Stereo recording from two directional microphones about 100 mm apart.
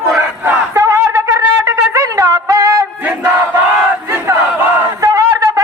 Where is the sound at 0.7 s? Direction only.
25° right (ahead or behind).